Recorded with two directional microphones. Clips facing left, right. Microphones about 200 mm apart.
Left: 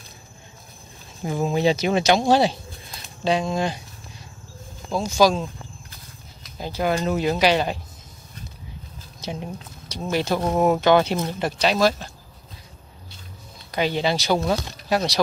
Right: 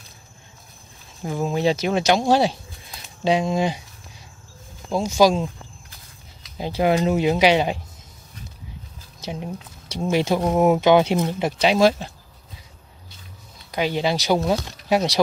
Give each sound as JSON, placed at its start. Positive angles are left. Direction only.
{"t": 1.2, "sound": "speech", "side_deg": 5}
{"t": 5.0, "sound": "speech", "side_deg": -10}
{"t": 6.6, "sound": "speech", "side_deg": -20}
{"t": 9.2, "sound": "speech", "side_deg": -5}
{"t": 9.8, "sound": "speech", "side_deg": -25}
{"t": 10.2, "sound": "speech", "side_deg": -10}
{"t": 13.7, "sound": "speech", "side_deg": -5}